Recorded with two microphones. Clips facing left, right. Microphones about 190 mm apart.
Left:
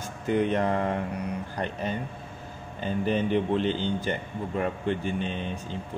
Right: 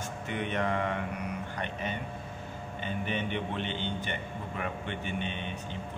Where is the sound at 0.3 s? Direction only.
35° left (ahead or behind).